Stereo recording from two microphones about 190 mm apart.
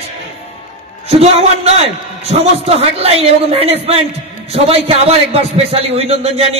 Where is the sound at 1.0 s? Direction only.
35° right (ahead or behind).